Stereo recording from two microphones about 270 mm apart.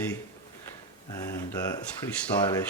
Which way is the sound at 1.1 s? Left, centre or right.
Centre.